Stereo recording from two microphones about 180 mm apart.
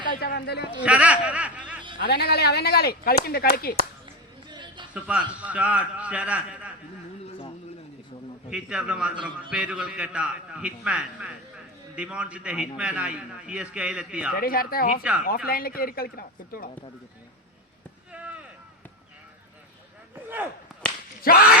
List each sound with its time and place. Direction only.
0.1 s a man's voice: 55° left (ahead or behind)
0.9 s speech: 5° right (ahead or behind)
2.0 s speech: 65° left (ahead or behind)
4.4 s a sound: 25° right (ahead or behind)
5.0 s a man's voice: 5° right (ahead or behind)
7.3 s a sound: 30° left (ahead or behind)
8.4 s a man's voice: 5° right (ahead or behind)
14.3 s speech: 55° left (ahead or behind)
18.1 s a sound: 5° right (ahead or behind)
21.2 s speech: 55° left (ahead or behind)